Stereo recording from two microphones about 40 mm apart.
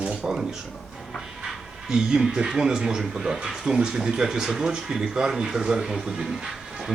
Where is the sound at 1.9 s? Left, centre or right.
Centre.